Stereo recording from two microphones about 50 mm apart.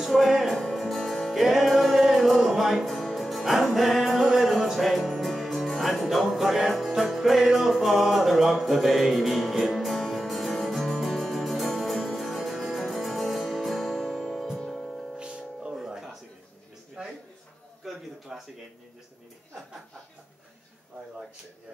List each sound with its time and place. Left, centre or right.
0.0 s music: centre
15.1 s music: right
15.7 s music: centre
17.0 s a sound: centre
18.3 s speech: centre